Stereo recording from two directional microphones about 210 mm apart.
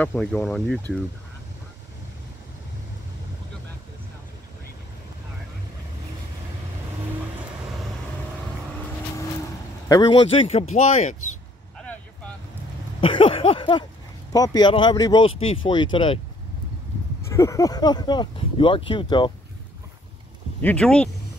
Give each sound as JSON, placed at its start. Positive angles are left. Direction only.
{"t": 0.0, "sound": "speech", "side_deg": 5}
{"t": 9.8, "sound": "speech", "side_deg": 20}
{"t": 13.0, "sound": "speech", "side_deg": 25}
{"t": 17.3, "sound": "speech", "side_deg": 15}
{"t": 20.6, "sound": "speech", "side_deg": 5}